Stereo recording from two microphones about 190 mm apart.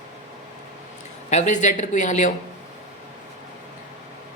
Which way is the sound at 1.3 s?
40° left (ahead or behind).